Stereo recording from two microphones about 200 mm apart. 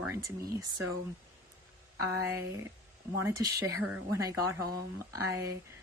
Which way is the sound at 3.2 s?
15° right (ahead or behind).